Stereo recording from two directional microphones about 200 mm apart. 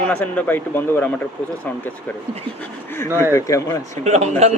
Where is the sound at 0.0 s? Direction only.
5° left (ahead or behind).